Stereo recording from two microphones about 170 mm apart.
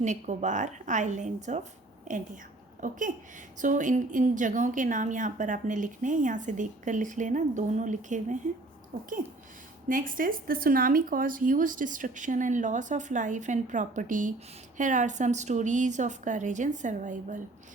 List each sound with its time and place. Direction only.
0.0 s a woman's voice: 45° right (ahead or behind)